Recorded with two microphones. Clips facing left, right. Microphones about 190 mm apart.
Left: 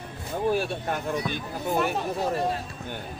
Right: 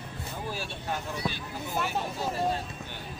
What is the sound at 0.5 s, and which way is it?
Speech, 55° left (ahead or behind).